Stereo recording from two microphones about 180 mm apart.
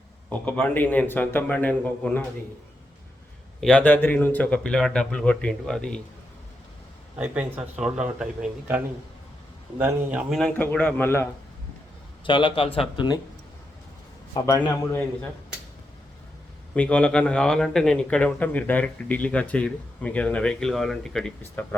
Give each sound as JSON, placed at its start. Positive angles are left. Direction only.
{"t": 0.3, "sound": "a man's voice", "side_deg": 5}
{"t": 3.6, "sound": "a man's voice", "side_deg": 5}
{"t": 7.2, "sound": "a man's voice", "side_deg": -10}
{"t": 12.2, "sound": "speech", "side_deg": 30}
{"t": 14.3, "sound": "speech", "side_deg": 20}
{"t": 16.7, "sound": "a man's voice", "side_deg": 5}